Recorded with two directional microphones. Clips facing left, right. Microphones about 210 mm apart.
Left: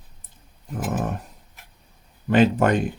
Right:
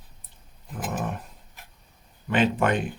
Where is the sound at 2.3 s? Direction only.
40° left (ahead or behind).